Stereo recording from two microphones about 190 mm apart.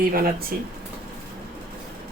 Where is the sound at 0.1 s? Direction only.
50° right (ahead or behind).